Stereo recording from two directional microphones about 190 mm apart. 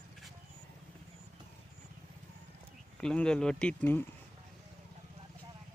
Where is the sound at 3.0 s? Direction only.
5° left (ahead or behind).